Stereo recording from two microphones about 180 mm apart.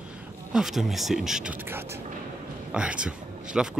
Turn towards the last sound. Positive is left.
turn(degrees=-5)  # may be behind; listen again after turning